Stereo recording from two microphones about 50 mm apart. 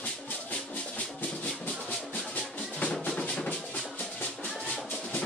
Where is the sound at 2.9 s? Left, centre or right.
Left.